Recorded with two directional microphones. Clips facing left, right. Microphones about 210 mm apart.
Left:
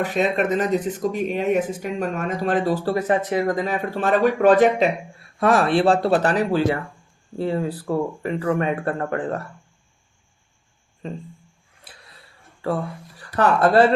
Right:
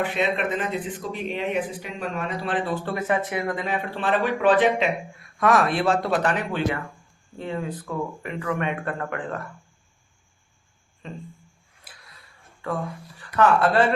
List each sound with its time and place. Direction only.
0.0 s speech: 40° left (ahead or behind)
5.4 s speech: 30° left (ahead or behind)
12.6 s speech: 35° left (ahead or behind)